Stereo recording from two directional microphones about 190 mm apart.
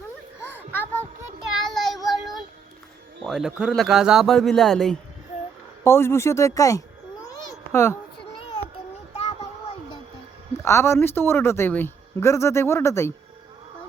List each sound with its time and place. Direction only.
0.4 s a sound: 10° left (ahead or behind)
1.7 s child singing: centre (ahead or behind)
3.2 s a man's voice: 5° right (ahead or behind)
5.8 s speech: 15° left (ahead or behind)
7.5 s a sound: 15° left (ahead or behind)
9.1 s child singing: 35° left (ahead or behind)
10.6 s speech: 15° left (ahead or behind)